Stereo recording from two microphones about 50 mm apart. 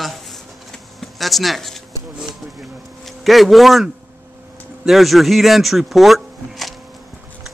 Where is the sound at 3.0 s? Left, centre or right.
Centre.